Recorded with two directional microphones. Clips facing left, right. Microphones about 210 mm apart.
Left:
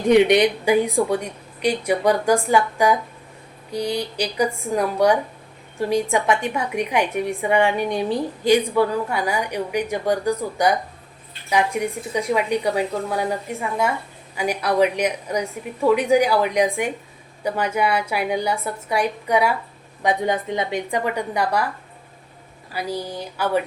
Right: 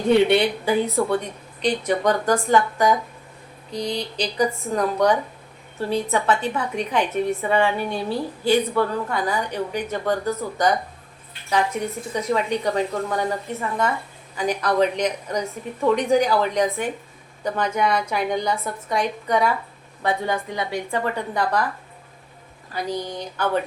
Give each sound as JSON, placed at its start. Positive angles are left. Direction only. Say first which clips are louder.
{"t": 0.1, "sound": "a woman's voice", "louder": "left 2 dB", "side_deg": 15}
{"t": 22.7, "sound": "a woman's voice", "louder": "even", "side_deg": 10}